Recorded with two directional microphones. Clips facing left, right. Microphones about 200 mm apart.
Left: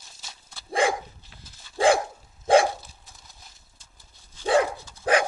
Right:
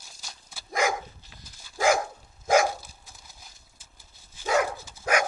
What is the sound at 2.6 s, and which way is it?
Dog, centre (ahead or behind).